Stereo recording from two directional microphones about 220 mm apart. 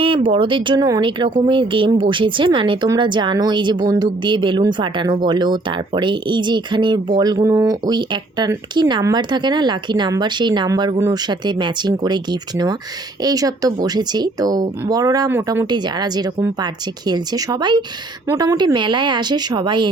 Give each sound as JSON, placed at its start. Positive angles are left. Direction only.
{"t": 0.0, "sound": "speech", "side_deg": -25}